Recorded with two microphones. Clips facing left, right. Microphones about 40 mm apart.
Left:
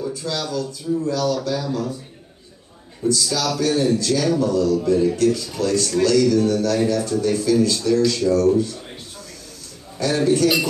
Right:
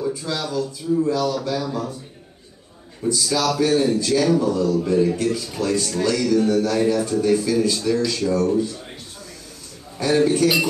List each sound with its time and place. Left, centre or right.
0.1 s a man's voice: centre
3.1 s a man's voice: right
9.9 s a man's voice: right